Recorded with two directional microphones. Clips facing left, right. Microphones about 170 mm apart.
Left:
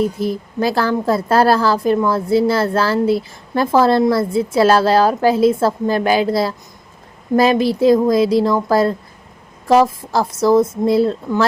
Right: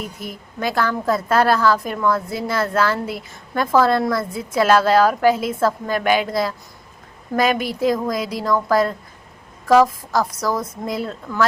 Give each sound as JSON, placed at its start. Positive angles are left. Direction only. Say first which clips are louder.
{"t": 0.2, "sound": "a woman's voice", "louder": "left 9 dB", "side_deg": 30}